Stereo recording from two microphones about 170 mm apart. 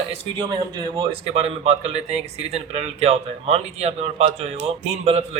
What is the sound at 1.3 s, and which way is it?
Speech, 35° right (ahead or behind).